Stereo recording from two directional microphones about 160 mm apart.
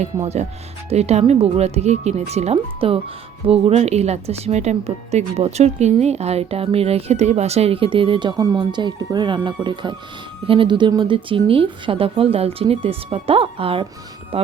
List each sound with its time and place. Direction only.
0.9 s speech: 40° right (ahead or behind)